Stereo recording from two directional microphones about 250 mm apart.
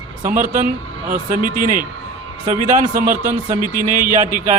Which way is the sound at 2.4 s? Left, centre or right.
Right.